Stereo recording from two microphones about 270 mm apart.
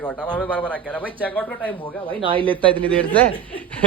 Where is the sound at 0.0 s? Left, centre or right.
Centre.